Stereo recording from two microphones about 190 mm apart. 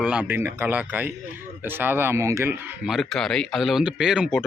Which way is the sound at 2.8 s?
Centre (ahead or behind).